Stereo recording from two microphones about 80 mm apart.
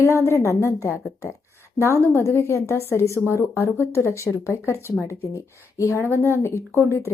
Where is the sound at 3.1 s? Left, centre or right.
Right.